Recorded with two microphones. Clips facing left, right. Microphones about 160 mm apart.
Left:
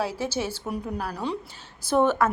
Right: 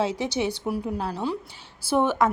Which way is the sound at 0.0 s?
20° right (ahead or behind).